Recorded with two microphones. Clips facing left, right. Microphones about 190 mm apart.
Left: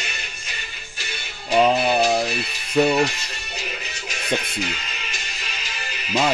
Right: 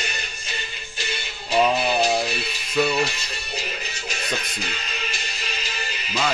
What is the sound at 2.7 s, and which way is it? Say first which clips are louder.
Speech: left 4 dB; 45° left (ahead or behind).